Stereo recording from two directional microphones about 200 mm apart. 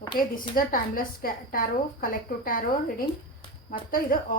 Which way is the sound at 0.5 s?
45° left (ahead or behind).